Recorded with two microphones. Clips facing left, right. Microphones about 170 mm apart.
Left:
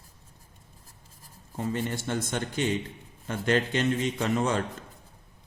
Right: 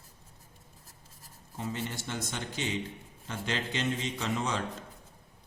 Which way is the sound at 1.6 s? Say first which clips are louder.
Left 6 dB; 50° left (ahead or behind).